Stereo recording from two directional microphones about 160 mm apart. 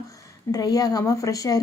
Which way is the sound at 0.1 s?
20° left (ahead or behind).